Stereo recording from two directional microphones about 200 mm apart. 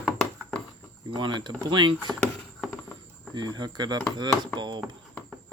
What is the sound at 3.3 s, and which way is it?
Speech, 20° right (ahead or behind).